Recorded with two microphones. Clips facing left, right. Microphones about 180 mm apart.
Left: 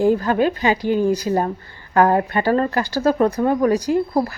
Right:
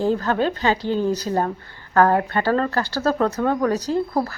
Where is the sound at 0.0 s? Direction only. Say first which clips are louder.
Left 4 dB; 10° left (ahead or behind).